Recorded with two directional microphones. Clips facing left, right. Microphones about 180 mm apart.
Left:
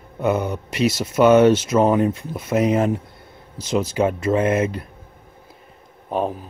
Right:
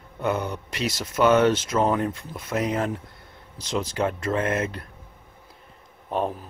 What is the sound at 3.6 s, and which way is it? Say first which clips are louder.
Speech: left 6 dB; 5° left (ahead or behind).